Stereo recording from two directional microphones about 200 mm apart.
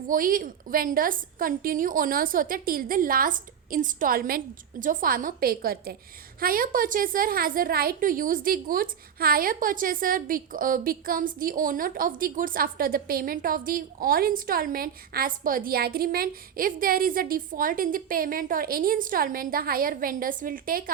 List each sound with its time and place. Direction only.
0.1 s a woman's voice: 45° right (ahead or behind)